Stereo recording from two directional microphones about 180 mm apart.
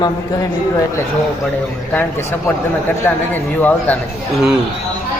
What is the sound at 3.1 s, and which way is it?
Speech, 10° left (ahead or behind).